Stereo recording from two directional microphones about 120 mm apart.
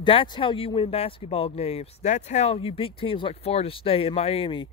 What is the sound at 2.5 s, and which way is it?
Speech, 50° left (ahead or behind).